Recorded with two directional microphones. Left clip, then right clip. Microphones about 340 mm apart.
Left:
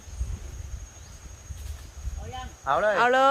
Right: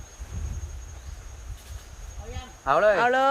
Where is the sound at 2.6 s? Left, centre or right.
Right.